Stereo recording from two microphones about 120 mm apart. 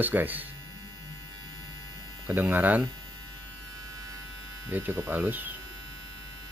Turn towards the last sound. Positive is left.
turn(degrees=-15)  # may be behind; listen again after turning